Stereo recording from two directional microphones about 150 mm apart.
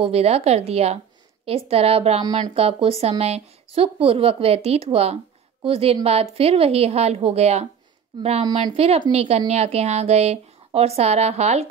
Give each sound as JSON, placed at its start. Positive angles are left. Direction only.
{"t": 0.0, "sound": "speech", "side_deg": -45}
{"t": 2.2, "sound": "speech", "side_deg": -25}
{"t": 2.5, "sound": "speech", "side_deg": -40}